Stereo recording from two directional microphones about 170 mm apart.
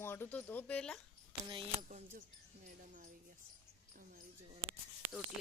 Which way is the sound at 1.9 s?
45° right (ahead or behind).